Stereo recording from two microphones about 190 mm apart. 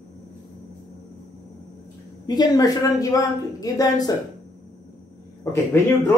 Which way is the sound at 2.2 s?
20° left (ahead or behind).